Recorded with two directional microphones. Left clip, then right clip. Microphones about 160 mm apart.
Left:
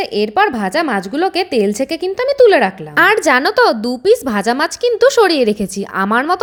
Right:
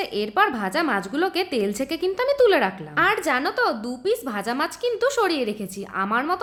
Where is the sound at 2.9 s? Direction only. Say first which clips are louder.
Left 10 dB; 50° left (ahead or behind).